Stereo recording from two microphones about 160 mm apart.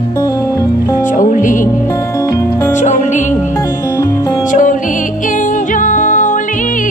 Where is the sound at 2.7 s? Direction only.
50° left (ahead or behind).